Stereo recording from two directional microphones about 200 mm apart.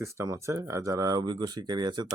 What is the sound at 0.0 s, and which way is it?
Speech, 15° right (ahead or behind).